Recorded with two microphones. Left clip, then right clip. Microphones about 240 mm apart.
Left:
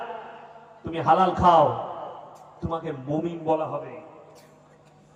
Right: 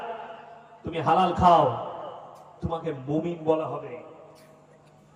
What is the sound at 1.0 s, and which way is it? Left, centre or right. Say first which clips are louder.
Speech: left 2 dB; right.